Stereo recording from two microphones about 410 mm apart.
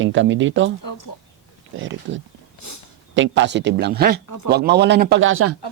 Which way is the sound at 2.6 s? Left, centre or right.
Left.